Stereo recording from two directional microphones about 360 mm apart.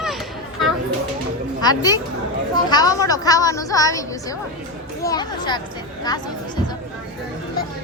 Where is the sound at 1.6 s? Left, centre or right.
Centre.